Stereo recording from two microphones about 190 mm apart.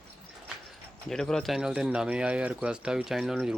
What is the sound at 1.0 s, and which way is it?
Speech, 5° left (ahead or behind).